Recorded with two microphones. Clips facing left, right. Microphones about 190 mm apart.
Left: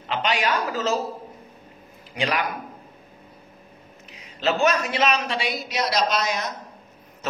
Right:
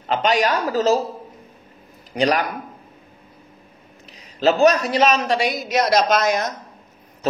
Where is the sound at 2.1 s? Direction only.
40° right (ahead or behind).